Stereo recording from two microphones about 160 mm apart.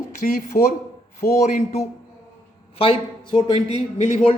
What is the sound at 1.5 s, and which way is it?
A man's voice, 45° left (ahead or behind).